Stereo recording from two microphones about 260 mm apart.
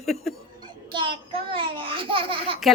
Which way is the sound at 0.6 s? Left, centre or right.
Centre.